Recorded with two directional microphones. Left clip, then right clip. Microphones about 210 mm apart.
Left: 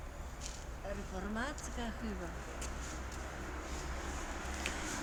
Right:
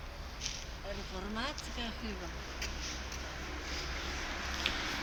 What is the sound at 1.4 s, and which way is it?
Speech, 55° left (ahead or behind).